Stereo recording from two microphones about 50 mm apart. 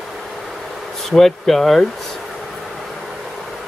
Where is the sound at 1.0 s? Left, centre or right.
Centre.